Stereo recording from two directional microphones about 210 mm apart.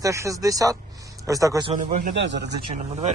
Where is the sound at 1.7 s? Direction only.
40° right (ahead or behind).